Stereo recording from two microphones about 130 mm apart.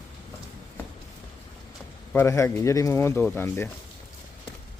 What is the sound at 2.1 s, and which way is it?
Speech, 20° left (ahead or behind).